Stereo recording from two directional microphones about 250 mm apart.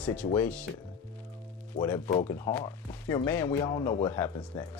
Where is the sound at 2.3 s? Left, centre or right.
Centre.